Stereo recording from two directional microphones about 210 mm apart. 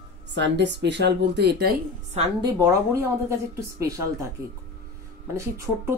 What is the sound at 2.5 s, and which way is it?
Speech, 15° right (ahead or behind).